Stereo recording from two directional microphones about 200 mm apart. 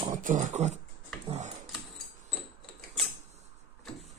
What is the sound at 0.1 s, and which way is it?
Speech, 40° right (ahead or behind).